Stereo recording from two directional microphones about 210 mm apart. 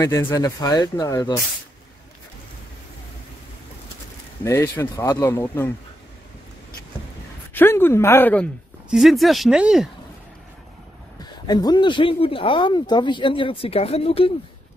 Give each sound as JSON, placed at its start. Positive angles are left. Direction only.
{"t": 0.0, "sound": "speech", "side_deg": 15}
{"t": 4.5, "sound": "speech", "side_deg": 15}
{"t": 7.5, "sound": "speech", "side_deg": 10}
{"t": 11.4, "sound": "speech", "side_deg": 20}